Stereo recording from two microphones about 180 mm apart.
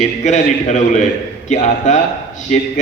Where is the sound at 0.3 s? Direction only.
40° left (ahead or behind).